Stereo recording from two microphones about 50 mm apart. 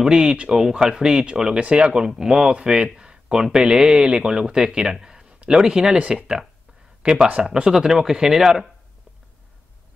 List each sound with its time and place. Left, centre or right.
0.0 s speech: centre